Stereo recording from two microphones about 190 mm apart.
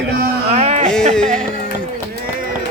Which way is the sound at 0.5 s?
35° right (ahead or behind).